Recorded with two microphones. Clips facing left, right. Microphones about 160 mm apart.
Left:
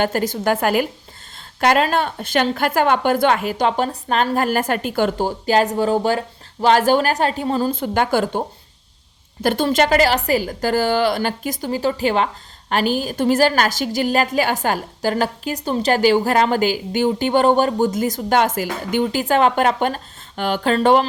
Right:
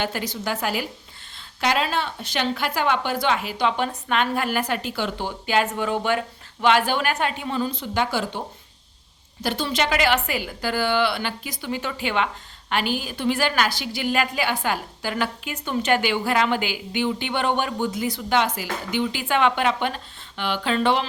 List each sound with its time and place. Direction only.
0.0 s a woman's voice: 45° left (ahead or behind)